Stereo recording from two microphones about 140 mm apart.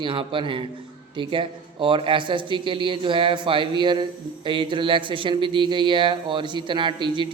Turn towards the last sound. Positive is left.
turn(degrees=-35)  # may be behind; listen again after turning